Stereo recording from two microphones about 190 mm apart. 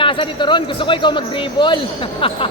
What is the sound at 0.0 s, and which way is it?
Speech, 25° left (ahead or behind).